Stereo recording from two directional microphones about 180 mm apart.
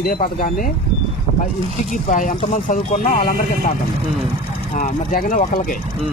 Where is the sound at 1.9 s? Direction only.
45° left (ahead or behind).